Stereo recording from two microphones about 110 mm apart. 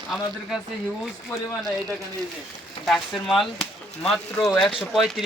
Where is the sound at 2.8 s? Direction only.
5° left (ahead or behind).